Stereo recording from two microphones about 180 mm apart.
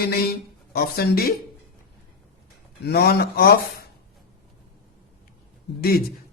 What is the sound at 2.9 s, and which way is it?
Speech, 60° left (ahead or behind).